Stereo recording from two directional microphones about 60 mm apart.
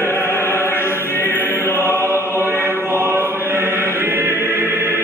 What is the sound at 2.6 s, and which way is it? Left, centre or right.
Chant, right.